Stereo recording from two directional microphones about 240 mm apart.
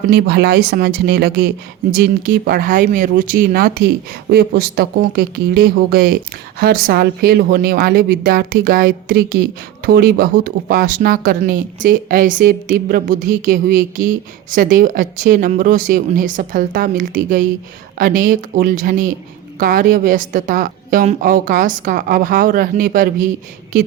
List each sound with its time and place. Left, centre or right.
0.1 s speech: right